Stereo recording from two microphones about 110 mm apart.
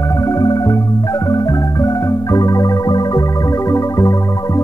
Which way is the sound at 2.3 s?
35° left (ahead or behind).